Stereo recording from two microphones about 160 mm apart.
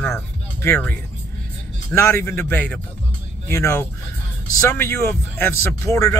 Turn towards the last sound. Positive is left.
turn(degrees=20)  # may be behind; listen again after turning